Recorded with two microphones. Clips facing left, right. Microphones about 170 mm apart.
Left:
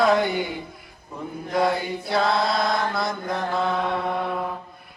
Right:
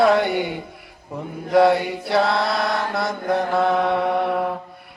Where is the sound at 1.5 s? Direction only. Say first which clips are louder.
Right 7 dB; 70° right (ahead or behind).